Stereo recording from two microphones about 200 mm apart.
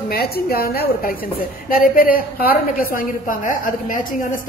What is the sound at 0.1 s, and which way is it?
A woman's voice, 50° left (ahead or behind).